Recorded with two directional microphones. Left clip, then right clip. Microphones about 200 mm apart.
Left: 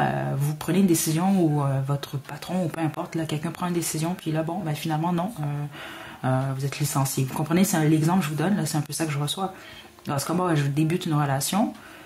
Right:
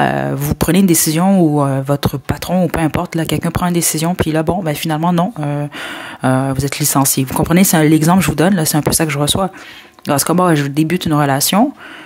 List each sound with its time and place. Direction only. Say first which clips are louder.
0.0 s speech: right 10 dB; 40° right (ahead or behind)